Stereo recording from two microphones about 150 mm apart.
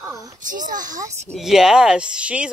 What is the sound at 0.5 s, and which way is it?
Speech, 60° right (ahead or behind).